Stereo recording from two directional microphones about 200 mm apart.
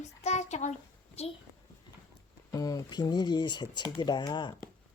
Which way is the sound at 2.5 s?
20° left (ahead or behind).